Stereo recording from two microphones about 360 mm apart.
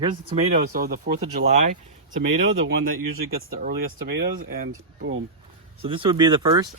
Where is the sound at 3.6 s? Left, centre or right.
Right.